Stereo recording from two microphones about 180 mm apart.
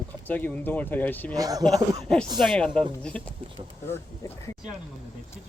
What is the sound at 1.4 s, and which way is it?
Speech, 20° right (ahead or behind).